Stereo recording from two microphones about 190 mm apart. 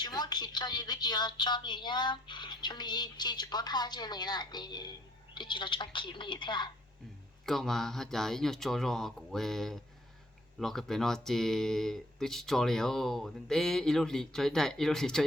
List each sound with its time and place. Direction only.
0.0 s a woman's voice: 20° left (ahead or behind)
7.4 s speech: centre (ahead or behind)